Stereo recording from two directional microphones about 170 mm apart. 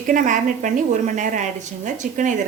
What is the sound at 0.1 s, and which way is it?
A woman's voice, 50° right (ahead or behind).